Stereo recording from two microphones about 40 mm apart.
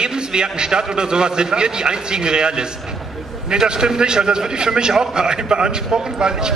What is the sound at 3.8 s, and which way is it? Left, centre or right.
A man's voice, centre.